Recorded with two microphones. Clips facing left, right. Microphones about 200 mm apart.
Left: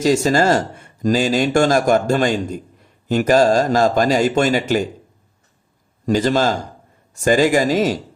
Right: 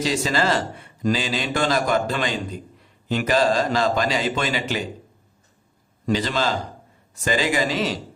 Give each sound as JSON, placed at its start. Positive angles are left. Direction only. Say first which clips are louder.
{"t": 0.0, "sound": "speech", "louder": "left 7 dB", "side_deg": 45}
{"t": 6.1, "sound": "speech", "louder": "left 6 dB", "side_deg": 45}